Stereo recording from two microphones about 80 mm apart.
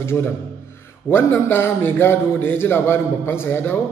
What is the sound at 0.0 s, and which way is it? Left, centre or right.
A man's voice, left.